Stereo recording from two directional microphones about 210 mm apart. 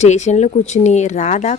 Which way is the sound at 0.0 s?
35° left (ahead or behind).